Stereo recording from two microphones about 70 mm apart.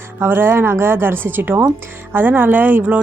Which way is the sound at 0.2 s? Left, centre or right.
Right.